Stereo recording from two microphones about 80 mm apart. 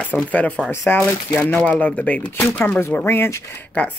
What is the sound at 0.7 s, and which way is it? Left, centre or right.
Speech, left.